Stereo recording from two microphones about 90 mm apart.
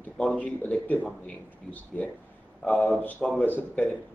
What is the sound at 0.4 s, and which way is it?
A man's voice, 15° left (ahead or behind).